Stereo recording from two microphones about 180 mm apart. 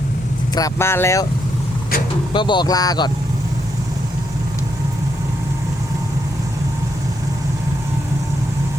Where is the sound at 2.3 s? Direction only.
25° left (ahead or behind).